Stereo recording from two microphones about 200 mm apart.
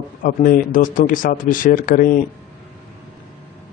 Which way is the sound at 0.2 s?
45° left (ahead or behind).